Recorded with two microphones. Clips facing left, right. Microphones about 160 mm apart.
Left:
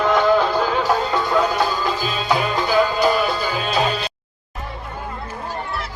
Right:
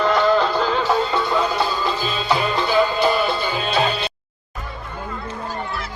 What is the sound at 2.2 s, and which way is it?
Music, 45° left (ahead or behind).